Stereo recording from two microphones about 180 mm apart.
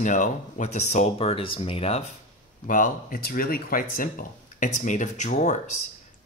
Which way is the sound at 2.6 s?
45° left (ahead or behind).